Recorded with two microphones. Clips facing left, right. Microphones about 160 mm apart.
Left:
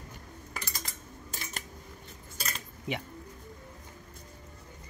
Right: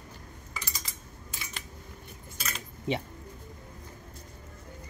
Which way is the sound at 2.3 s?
35° left (ahead or behind).